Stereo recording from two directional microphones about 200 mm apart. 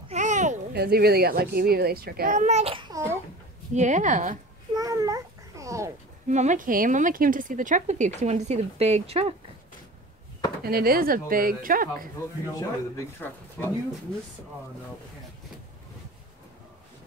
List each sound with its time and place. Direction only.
0.1 s babbling: 35° right (ahead or behind)
0.7 s a child's voice: 50° right (ahead or behind); by 3.2 s 15° right (ahead or behind)
3.7 s speech: 35° right (ahead or behind)
4.7 s a child's voice: 15° right (ahead or behind)
6.2 s speech: 35° right (ahead or behind)
10.6 s a child's voice: 50° right (ahead or behind)
12.2 s speech: 15° left (ahead or behind)